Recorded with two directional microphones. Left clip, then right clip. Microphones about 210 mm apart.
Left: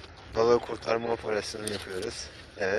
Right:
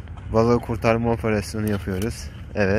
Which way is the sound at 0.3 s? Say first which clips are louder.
Right 4 dB; 15° right (ahead or behind).